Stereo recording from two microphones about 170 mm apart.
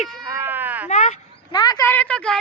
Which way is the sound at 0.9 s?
45° left (ahead or behind).